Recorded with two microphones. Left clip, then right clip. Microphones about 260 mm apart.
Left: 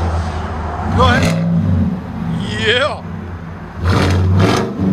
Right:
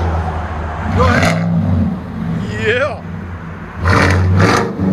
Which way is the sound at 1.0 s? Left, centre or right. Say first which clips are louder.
Even; centre.